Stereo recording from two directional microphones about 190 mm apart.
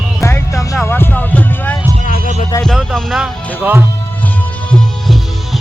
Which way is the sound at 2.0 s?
45° left (ahead or behind).